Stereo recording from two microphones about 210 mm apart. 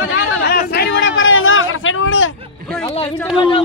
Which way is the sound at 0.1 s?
50° left (ahead or behind).